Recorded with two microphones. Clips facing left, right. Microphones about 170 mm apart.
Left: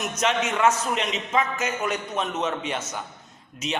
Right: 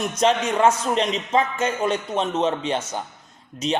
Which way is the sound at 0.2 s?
35° right (ahead or behind).